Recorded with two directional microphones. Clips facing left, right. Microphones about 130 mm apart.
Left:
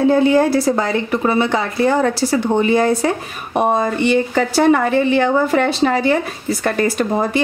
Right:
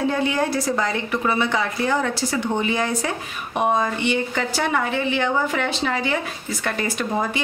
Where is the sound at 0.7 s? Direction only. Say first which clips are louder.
Left 6 dB; 35° left (ahead or behind).